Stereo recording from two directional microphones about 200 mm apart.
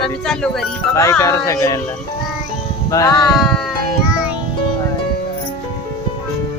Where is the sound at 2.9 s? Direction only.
15° left (ahead or behind).